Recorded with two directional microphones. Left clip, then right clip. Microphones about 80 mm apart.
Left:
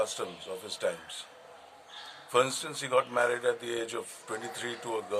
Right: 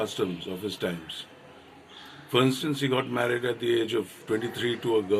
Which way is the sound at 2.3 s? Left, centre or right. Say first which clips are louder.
Right 3 dB; left.